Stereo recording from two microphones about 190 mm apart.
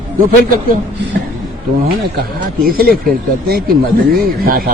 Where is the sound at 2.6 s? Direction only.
50° right (ahead or behind).